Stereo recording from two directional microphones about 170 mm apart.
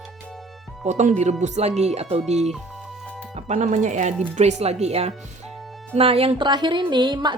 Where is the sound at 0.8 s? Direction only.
45° right (ahead or behind).